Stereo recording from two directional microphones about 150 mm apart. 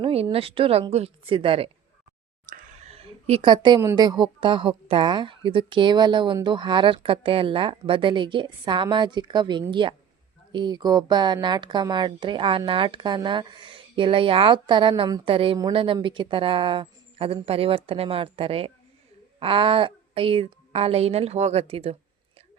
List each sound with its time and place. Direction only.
0.0 s speech: 40° right (ahead or behind)
2.9 s a sound: 40° right (ahead or behind)
3.9 s speech: 30° right (ahead or behind)